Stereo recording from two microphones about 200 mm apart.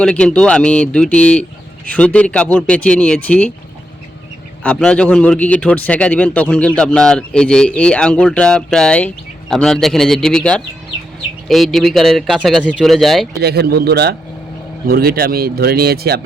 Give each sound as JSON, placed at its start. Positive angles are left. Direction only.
{"t": 0.0, "sound": "a man's voice", "side_deg": 5}
{"t": 4.6, "sound": "a man's voice", "side_deg": 5}
{"t": 13.4, "sound": "speech", "side_deg": -55}